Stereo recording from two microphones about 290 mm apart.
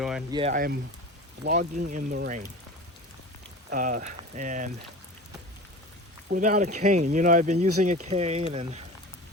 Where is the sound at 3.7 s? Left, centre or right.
Right.